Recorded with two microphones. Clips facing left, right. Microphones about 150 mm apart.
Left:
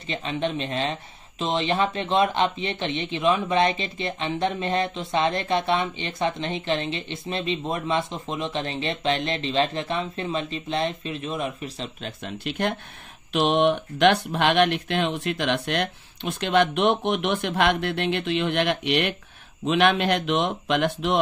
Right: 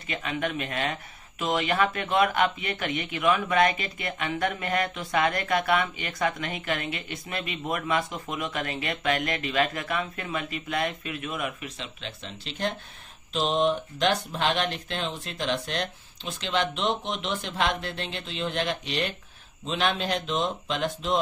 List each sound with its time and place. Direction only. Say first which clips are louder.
0.1 s speech: left 3 dB; 30° left (ahead or behind); by 21.2 s 65° left (ahead or behind)